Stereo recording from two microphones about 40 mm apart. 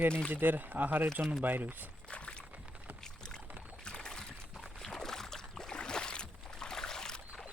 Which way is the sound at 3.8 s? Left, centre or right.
Left.